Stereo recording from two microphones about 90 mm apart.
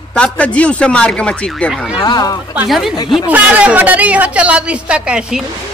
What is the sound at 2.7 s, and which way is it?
Speech, 5° right (ahead or behind).